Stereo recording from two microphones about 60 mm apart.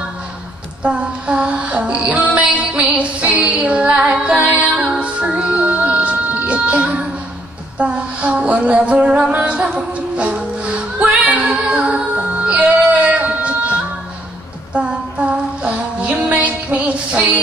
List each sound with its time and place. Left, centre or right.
0.8 s music: centre
7.8 s a sound: right
9.5 s music: centre
14.7 s female singing: centre
16.8 s music: right